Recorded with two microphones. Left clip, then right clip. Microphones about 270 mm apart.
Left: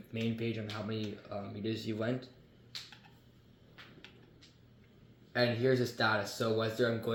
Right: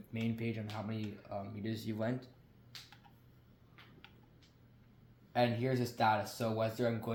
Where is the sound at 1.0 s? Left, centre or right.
Right.